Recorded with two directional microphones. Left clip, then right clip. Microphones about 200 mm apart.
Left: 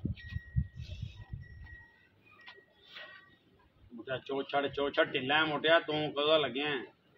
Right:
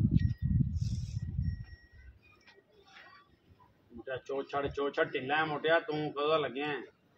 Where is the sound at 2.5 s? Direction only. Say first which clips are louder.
Left 7 dB; 35° left (ahead or behind).